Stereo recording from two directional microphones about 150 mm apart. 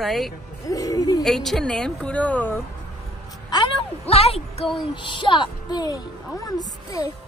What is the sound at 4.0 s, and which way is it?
Speech, 40° left (ahead or behind).